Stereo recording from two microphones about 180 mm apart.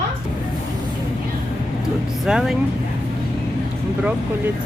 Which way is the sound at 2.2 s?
Centre (ahead or behind).